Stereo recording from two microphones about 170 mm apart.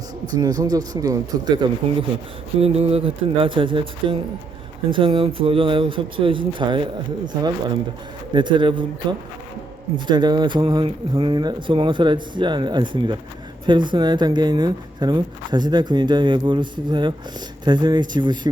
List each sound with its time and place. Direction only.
0.3 s speech: 20° right (ahead or behind)
8.3 s speech: 30° right (ahead or behind)